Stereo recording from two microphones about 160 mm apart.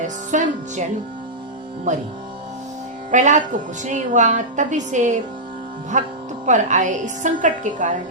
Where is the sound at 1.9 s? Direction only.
50° right (ahead or behind).